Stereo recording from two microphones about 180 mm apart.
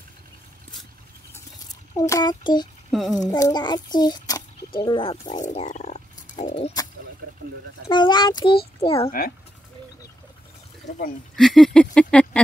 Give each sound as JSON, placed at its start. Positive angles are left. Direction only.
{"t": 2.0, "sound": "a child's voice", "side_deg": 20}
{"t": 2.9, "sound": "speech", "side_deg": 0}
{"t": 3.2, "sound": "a child's voice", "side_deg": 20}
{"t": 5.4, "sound": "frog", "side_deg": 40}
{"t": 6.5, "sound": "a child's voice", "side_deg": 25}
{"t": 7.2, "sound": "a sound", "side_deg": -65}
{"t": 7.9, "sound": "a child's voice", "side_deg": 25}
{"t": 9.2, "sound": "speech", "side_deg": 55}
{"t": 11.3, "sound": "a sound", "side_deg": 0}